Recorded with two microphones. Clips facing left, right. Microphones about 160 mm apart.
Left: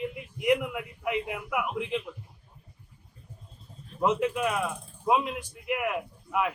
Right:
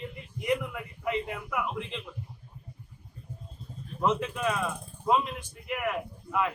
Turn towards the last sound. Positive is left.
turn(degrees=15)  # may be behind; listen again after turning